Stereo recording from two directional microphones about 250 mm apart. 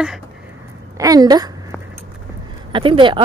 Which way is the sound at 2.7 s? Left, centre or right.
Centre.